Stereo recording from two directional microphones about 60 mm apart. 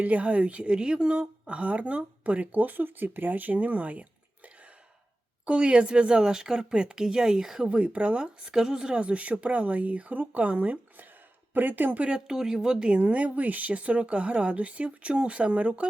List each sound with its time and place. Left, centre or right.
0.0 s a woman's voice: right
5.5 s speech: centre
12.0 s speech: centre
13.0 s a woman's voice: right